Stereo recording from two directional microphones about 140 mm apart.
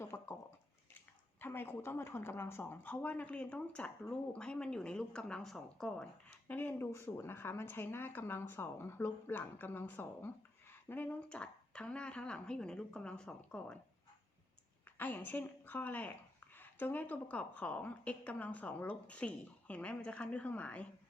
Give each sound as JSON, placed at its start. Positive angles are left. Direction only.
{"t": 0.0, "sound": "a sound", "side_deg": 20}
{"t": 1.4, "sound": "speech", "side_deg": 15}
{"t": 14.9, "sound": "speech", "side_deg": 15}